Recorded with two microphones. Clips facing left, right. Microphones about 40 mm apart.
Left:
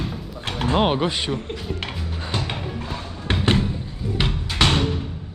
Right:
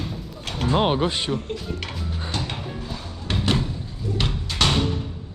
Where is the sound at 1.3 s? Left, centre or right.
Left.